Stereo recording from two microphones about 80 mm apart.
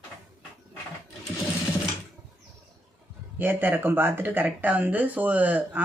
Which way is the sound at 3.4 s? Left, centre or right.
Right.